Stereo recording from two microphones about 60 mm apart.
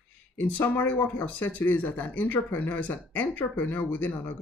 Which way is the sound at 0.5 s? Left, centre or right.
Left.